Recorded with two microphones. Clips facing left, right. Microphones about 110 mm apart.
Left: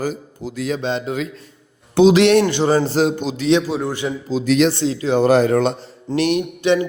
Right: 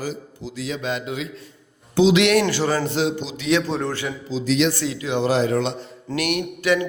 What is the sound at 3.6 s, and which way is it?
Speech, 5° left (ahead or behind).